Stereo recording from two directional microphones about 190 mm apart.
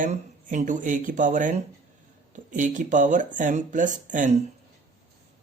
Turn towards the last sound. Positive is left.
turn(degrees=-40)  # may be behind; listen again after turning